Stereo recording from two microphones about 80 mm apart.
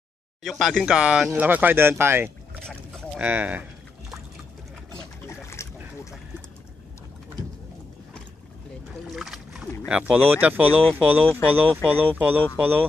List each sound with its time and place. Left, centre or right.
0.4 s speech: centre
1.3 s speech: centre
2.6 s boat: centre
3.2 s speech: right
5.2 s boat: left
9.1 s boat: centre
9.8 s speech: centre